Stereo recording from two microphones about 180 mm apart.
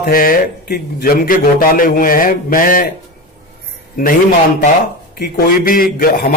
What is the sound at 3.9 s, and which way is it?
A man's voice, 50° left (ahead or behind).